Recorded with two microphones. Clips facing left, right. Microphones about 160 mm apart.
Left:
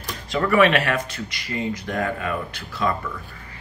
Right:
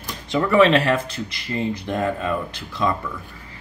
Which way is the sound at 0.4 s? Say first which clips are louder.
Right 2 dB; 25° right (ahead or behind).